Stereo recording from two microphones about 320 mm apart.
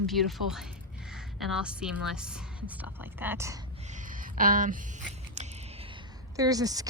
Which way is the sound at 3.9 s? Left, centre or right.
Right.